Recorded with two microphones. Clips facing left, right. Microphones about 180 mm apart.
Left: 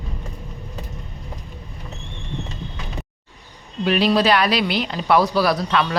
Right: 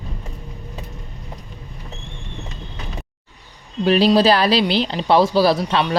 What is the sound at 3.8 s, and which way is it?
Speech, 35° right (ahead or behind).